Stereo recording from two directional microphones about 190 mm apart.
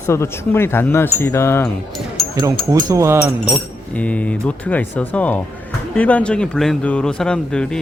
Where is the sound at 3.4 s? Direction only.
5° left (ahead or behind).